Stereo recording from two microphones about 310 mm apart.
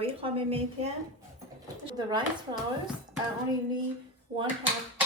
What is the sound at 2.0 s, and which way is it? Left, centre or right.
Speech, centre.